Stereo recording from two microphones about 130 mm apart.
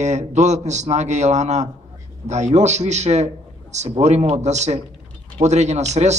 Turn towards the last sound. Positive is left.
turn(degrees=-60)  # may be behind; listen again after turning